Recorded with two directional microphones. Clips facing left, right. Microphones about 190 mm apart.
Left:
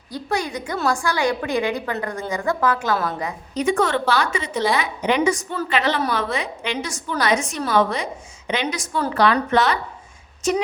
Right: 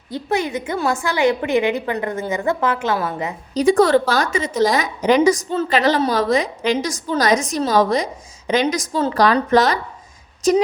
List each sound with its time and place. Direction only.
0.1 s a woman's voice: 20° right (ahead or behind)
3.5 s a woman's voice: 35° right (ahead or behind)